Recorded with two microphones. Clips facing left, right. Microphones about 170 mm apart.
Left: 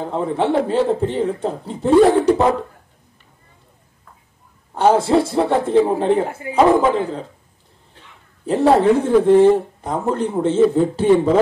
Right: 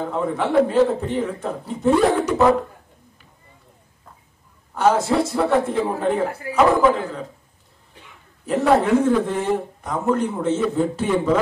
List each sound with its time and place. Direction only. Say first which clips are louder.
0.1 s a man's voice: left 2 dB; 30° left (ahead or behind)
4.7 s a man's voice: left 3 dB; 30° left (ahead or behind)
8.5 s speech: left 3 dB; 30° left (ahead or behind)